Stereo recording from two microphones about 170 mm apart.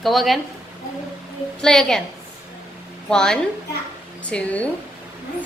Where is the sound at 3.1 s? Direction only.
5° left (ahead or behind).